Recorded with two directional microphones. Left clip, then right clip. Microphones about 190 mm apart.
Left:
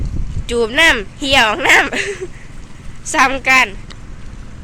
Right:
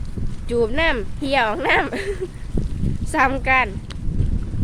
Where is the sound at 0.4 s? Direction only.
Centre (ahead or behind).